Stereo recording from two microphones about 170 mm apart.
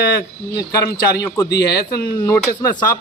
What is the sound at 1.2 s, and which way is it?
A man's voice, 20° left (ahead or behind).